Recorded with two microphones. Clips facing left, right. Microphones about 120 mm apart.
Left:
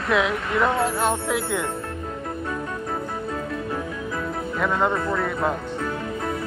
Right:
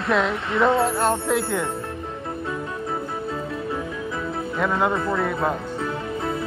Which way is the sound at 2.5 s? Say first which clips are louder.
Right 1 dB; 5° right (ahead or behind).